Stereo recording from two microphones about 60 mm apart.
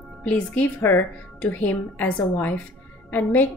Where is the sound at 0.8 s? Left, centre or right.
Left.